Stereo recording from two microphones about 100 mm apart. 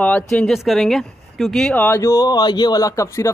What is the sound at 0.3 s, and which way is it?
Speech, centre (ahead or behind).